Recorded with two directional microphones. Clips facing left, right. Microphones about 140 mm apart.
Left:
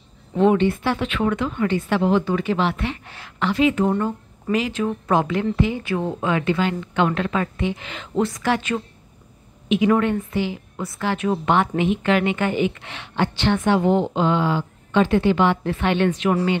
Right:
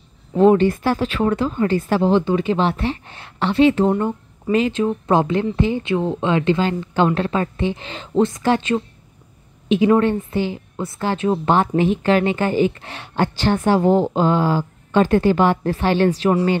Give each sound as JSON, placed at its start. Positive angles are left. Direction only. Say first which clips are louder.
{"t": 0.4, "sound": "a woman's voice", "louder": "right 4 dB", "side_deg": -40}